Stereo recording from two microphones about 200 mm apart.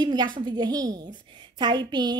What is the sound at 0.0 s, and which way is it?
A woman's voice, 20° right (ahead or behind).